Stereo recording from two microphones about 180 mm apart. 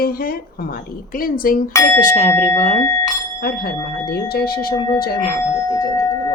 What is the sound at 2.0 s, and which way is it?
Speech, 35° left (ahead or behind).